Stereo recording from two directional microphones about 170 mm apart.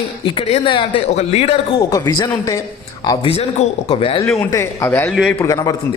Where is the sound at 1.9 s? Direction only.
20° left (ahead or behind).